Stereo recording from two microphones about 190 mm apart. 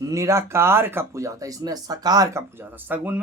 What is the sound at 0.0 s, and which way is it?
Speech, 15° right (ahead or behind).